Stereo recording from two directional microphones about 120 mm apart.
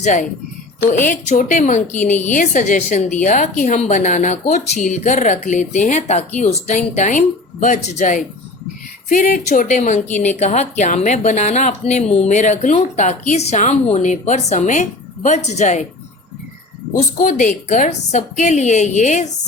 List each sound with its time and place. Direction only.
0.0 s a woman's voice: 90° left
10.4 s a woman's voice: 75° left (ahead or behind)
17.2 s a woman's voice: 90° left